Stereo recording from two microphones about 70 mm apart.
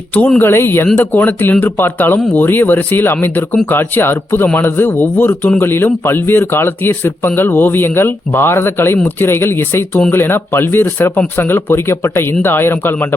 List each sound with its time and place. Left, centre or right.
0.3 s a man's voice: left